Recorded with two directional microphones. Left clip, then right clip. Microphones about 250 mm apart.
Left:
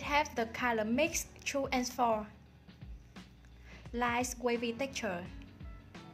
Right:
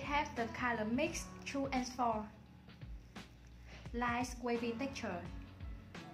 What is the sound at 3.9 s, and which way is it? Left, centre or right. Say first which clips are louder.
A woman's voice: left 5 dB; left.